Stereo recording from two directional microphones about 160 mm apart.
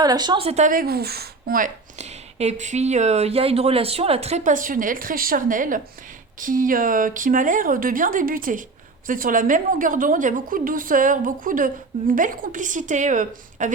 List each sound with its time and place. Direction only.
0.0 s a woman's voice: 25° right (ahead or behind); by 13.7 s 50° right (ahead or behind)